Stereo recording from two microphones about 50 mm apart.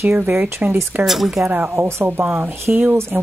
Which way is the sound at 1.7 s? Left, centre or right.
Right.